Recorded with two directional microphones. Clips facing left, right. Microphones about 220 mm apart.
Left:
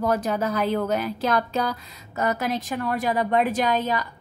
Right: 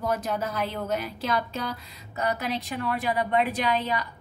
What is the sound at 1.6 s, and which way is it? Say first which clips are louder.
Music: left 6 dB; 90° left.